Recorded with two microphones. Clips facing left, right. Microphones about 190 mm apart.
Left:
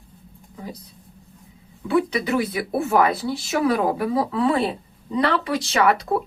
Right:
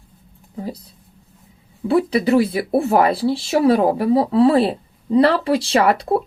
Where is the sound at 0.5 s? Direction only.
30° right (ahead or behind).